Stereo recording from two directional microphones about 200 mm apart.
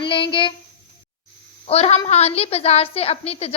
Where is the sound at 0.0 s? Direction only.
25° left (ahead or behind).